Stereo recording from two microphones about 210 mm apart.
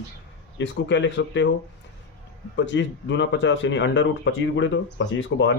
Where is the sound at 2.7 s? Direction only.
60° left (ahead or behind).